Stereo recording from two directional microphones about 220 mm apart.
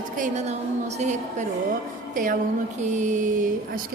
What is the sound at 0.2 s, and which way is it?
A woman's voice, 30° right (ahead or behind).